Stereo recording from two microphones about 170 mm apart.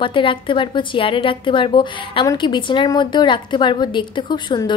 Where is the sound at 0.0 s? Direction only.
30° left (ahead or behind).